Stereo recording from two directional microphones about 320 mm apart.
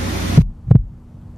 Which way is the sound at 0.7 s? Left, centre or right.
Centre.